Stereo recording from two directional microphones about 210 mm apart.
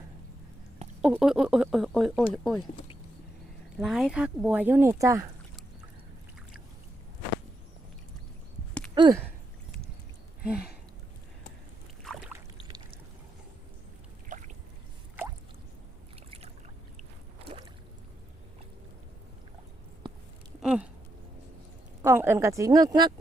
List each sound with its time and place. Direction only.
1.0 s speech: 5° right (ahead or behind)
3.8 s speech: centre (ahead or behind)
9.0 s speech: 20° right (ahead or behind)
12.0 s rowboat: centre (ahead or behind)
14.3 s a sound: 40° right (ahead or behind)
20.6 s a sound: 5° right (ahead or behind)
22.0 s speech: 10° right (ahead or behind)